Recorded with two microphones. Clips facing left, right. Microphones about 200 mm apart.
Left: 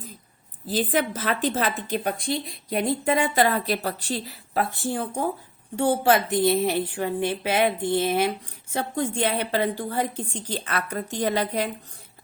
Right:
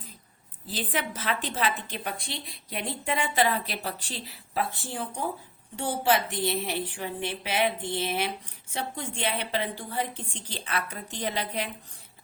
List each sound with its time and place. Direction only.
0.7 s a woman's voice: 45° left (ahead or behind)